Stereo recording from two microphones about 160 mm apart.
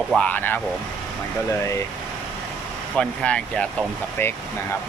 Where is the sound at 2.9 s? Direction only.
5° left (ahead or behind).